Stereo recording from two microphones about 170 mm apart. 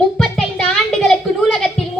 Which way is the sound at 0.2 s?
5° left (ahead or behind).